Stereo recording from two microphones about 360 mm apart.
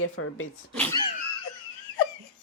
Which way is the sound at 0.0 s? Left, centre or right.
Left.